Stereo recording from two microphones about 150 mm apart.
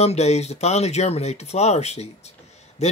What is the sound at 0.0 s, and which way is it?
Speech, 45° left (ahead or behind).